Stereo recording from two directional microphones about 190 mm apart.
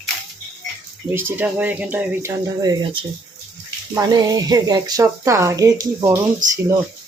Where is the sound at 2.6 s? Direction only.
25° right (ahead or behind).